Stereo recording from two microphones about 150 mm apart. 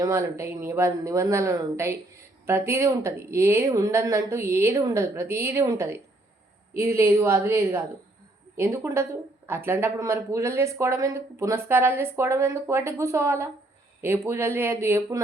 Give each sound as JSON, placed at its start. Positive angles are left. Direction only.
{"t": 0.0, "sound": "speech", "side_deg": -20}